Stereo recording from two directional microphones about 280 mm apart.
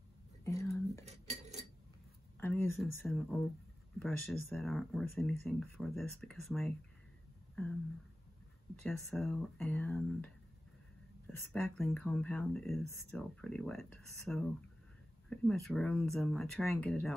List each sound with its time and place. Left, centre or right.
0.5 s whispering: centre
1.0 s cutlery: right
2.4 s speech: centre
8.8 s speech: centre